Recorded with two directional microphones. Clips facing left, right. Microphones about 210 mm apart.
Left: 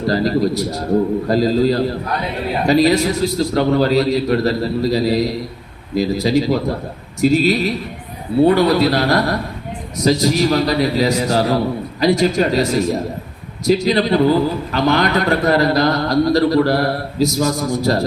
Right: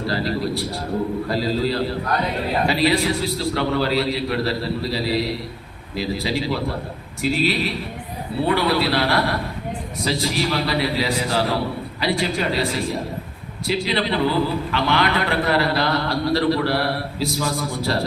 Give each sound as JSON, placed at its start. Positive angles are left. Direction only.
{"t": 0.1, "sound": "a man's voice", "side_deg": 40}